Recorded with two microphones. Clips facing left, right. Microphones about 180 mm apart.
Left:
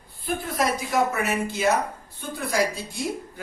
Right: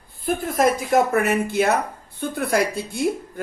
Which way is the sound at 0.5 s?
50° right (ahead or behind).